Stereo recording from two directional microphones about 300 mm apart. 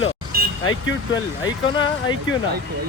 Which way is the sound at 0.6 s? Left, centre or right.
Left.